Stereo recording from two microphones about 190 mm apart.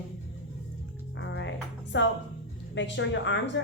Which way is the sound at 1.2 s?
70° left (ahead or behind).